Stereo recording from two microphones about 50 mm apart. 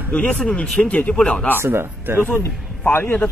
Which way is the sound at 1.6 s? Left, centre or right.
Right.